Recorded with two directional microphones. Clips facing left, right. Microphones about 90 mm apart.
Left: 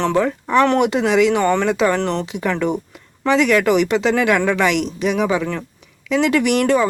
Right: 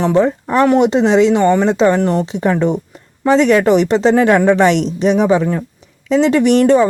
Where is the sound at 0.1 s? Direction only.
25° right (ahead or behind).